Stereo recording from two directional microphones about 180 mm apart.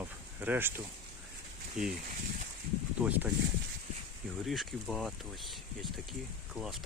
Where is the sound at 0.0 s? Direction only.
10° right (ahead or behind).